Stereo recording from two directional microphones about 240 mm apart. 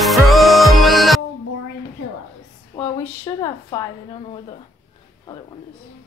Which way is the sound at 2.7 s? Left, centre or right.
Centre.